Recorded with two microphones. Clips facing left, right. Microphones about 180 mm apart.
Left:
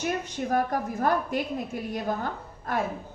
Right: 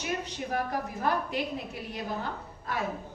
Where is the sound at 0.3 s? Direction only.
50° left (ahead or behind).